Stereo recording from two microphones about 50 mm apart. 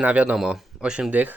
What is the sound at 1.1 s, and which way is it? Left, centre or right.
Speech, right.